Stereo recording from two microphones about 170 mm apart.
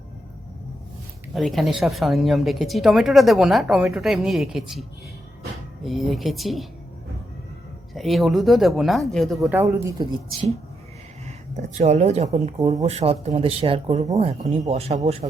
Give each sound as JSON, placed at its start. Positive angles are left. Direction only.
{"t": 1.3, "sound": "speech", "side_deg": 0}
{"t": 7.9, "sound": "speech", "side_deg": 0}
{"t": 10.0, "sound": "speech", "side_deg": -25}
{"t": 11.5, "sound": "speech", "side_deg": -45}
{"t": 12.5, "sound": "speech", "side_deg": -25}
{"t": 12.8, "sound": "speech", "side_deg": -40}
{"t": 14.4, "sound": "speech", "side_deg": -25}
{"t": 14.7, "sound": "speech", "side_deg": -40}